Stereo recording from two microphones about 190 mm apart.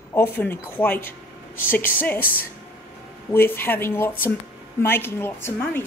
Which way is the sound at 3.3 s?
10° left (ahead or behind).